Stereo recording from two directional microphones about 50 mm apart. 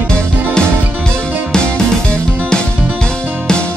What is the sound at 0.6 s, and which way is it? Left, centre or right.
Music, centre.